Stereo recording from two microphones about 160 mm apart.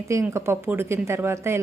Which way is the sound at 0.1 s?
15° right (ahead or behind).